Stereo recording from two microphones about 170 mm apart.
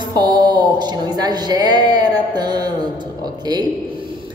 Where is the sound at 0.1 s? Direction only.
25° right (ahead or behind).